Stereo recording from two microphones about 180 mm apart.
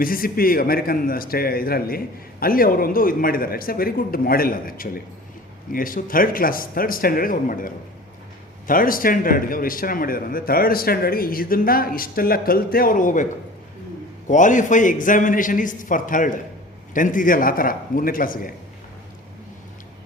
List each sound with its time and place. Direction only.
0.0 s a man's voice: 55° left (ahead or behind)
14.3 s a man's voice: 45° left (ahead or behind)